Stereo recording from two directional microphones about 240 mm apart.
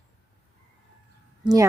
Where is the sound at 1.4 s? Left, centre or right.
Centre.